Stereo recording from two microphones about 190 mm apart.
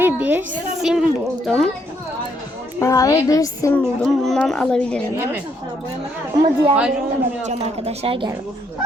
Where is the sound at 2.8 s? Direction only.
15° left (ahead or behind).